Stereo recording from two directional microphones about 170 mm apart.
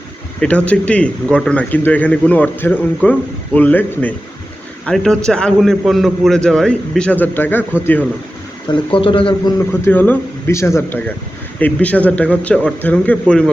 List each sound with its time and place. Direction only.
0.3 s a man's voice: 5° left (ahead or behind)
8.7 s speech: 30° left (ahead or behind)
9.8 s speech: 10° left (ahead or behind)